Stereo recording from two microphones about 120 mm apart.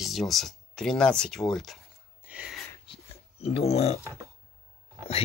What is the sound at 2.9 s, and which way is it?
Dog, 45° left (ahead or behind).